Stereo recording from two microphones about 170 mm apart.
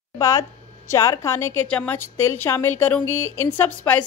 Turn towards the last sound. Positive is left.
turn(degrees=10)  # may be behind; listen again after turning